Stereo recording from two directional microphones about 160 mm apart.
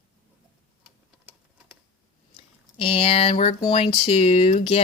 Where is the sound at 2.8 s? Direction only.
35° left (ahead or behind).